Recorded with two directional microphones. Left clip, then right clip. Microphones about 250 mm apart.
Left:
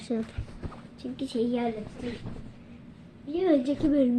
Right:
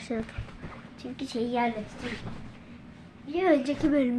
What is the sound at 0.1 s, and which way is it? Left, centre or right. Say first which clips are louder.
A woman's voice: left 2 dB; centre.